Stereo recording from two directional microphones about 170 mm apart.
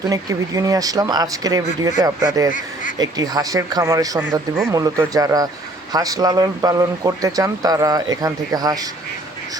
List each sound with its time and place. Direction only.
0.1 s speech: 20° right (ahead or behind)
4.2 s speech: 10° right (ahead or behind)
4.7 s speech: 20° right (ahead or behind)